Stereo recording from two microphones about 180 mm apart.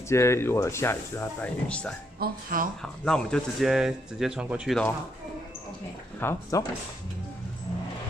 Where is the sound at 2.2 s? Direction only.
50° right (ahead or behind).